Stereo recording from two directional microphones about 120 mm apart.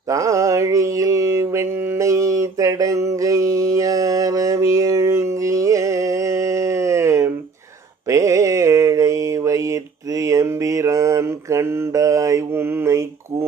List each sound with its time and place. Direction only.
0.1 s mantra: 30° right (ahead or behind)